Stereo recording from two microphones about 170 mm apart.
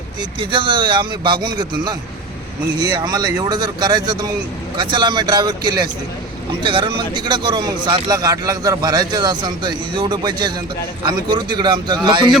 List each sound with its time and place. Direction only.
0.2 s speech: 30° right (ahead or behind)